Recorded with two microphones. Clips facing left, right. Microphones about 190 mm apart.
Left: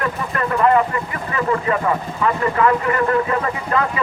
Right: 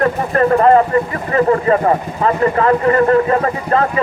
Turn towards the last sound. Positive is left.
turn(degrees=-40)  # may be behind; listen again after turning